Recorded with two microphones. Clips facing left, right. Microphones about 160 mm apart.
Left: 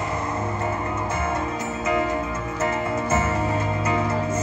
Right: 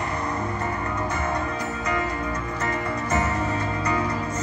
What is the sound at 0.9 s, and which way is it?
Music, 25° left (ahead or behind).